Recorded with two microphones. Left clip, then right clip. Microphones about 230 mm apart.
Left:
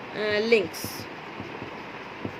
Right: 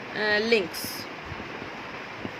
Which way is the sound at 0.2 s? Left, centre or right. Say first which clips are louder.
Left 1 dB; right.